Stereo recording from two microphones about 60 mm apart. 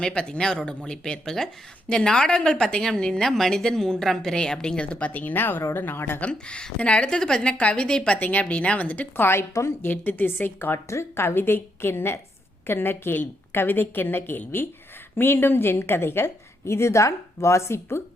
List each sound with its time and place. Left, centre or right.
0.0 s a woman's voice: centre; by 6.1 s left
6.1 s speech: left
9.1 s a woman's voice: left
10.8 s a woman's voice: left
16.6 s a woman's voice: left